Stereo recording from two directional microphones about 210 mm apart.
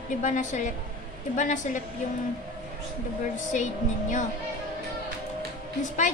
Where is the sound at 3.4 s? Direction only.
35° left (ahead or behind).